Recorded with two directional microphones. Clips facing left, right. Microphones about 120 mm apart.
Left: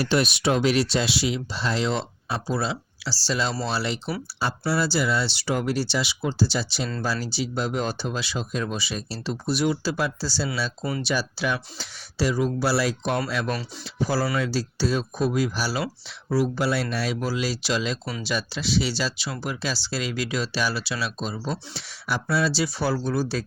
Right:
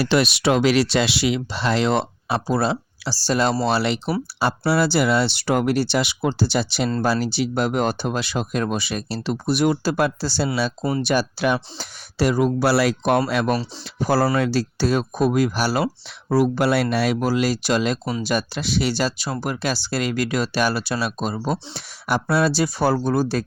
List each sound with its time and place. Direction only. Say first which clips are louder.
0.0 s speech: right 4 dB; 90° right; by 3.5 s 55° right (ahead or behind)
3.6 s speech: right 7 dB; 65° right (ahead or behind)